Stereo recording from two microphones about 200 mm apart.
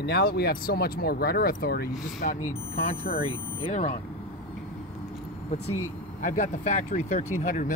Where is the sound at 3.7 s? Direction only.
35° left (ahead or behind).